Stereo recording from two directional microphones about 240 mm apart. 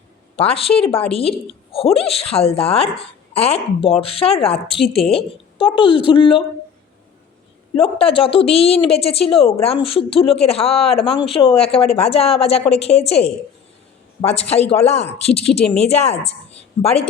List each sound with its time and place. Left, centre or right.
0.3 s speech: left
7.8 s a man's voice: left